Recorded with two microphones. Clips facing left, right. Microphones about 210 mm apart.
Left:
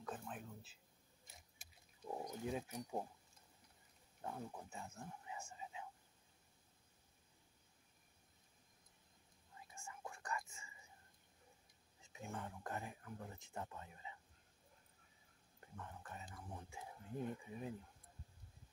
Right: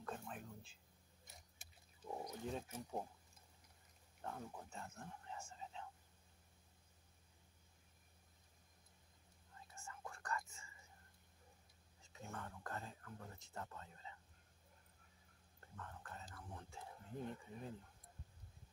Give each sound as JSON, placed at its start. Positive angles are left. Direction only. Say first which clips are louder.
{"t": 0.0, "sound": "a sound", "louder": "left 1 dB", "side_deg": 0}
{"t": 2.0, "sound": "speech", "louder": "left 2 dB", "side_deg": 5}
{"t": 4.2, "sound": "speech", "louder": "left 2 dB", "side_deg": 10}
{"t": 9.7, "sound": "whispering", "louder": "left 1 dB", "side_deg": 15}
{"t": 12.0, "sound": "speech", "louder": "left 3 dB", "side_deg": 15}
{"t": 15.7, "sound": "speech", "louder": "left 1 dB", "side_deg": 15}